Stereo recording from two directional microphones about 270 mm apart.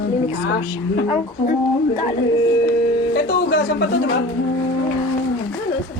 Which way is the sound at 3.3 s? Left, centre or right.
Left.